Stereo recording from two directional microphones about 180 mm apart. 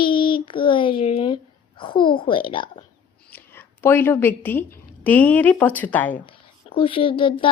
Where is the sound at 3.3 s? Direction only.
10° left (ahead or behind).